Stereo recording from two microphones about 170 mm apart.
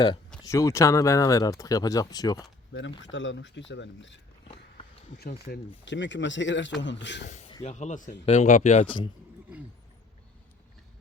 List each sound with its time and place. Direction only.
0.4 s speech: 20° left (ahead or behind)
2.7 s speech: 90° left
5.5 s speech: 90° left
7.3 s speech: 40° left (ahead or behind)